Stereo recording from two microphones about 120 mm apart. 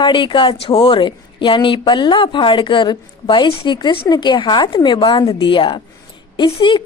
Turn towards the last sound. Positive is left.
turn(degrees=40)  # may be behind; listen again after turning